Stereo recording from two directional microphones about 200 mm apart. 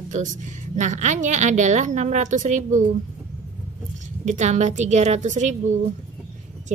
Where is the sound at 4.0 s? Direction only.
35° right (ahead or behind).